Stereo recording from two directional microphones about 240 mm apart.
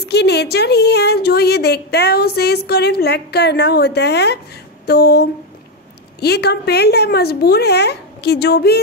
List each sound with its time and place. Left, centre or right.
0.1 s a woman's voice: left